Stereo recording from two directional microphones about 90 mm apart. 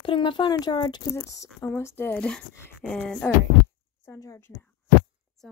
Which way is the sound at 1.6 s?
25° left (ahead or behind).